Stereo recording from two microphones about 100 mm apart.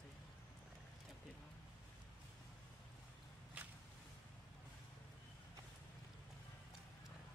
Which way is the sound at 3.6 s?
15° right (ahead or behind).